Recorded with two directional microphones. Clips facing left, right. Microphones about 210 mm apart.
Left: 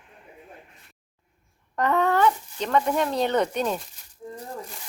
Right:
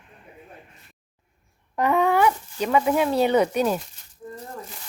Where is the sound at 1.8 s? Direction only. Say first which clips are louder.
Right 2 dB; 10° right (ahead or behind).